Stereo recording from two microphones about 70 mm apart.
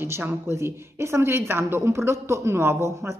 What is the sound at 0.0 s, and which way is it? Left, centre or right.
A woman's voice, right.